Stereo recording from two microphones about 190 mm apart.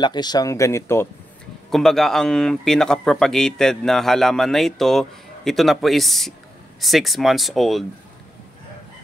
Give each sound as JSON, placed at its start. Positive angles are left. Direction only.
{"t": 0.0, "sound": "speech", "side_deg": 20}
{"t": 1.7, "sound": "speech", "side_deg": 0}